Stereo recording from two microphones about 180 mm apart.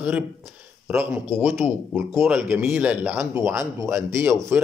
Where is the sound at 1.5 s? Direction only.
Centre (ahead or behind).